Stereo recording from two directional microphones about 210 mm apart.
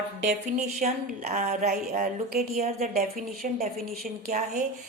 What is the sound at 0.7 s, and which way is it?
A woman's voice, 35° right (ahead or behind).